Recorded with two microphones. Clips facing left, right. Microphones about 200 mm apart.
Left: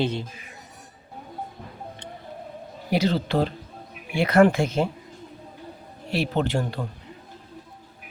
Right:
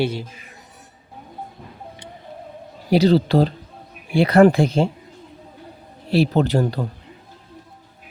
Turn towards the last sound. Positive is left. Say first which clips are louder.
# right 6 dB
turn(degrees=-40)  # may be behind; listen again after turning